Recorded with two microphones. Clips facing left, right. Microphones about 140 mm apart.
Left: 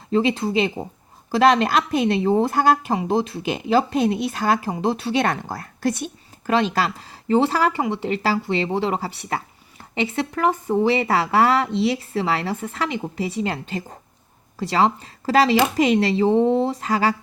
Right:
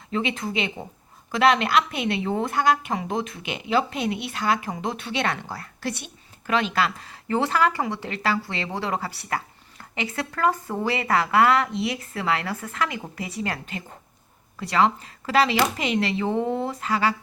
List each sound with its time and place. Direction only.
0.1 s a woman's voice: 35° left (ahead or behind)